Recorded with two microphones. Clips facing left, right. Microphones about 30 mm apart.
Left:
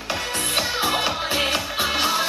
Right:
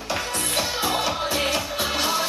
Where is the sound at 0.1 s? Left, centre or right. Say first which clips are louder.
Left 2 dB; centre.